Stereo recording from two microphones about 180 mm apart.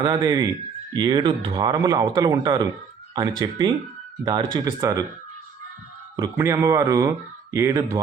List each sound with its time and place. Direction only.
0.0 s speech: 20° right (ahead or behind)
6.1 s speech: 15° right (ahead or behind)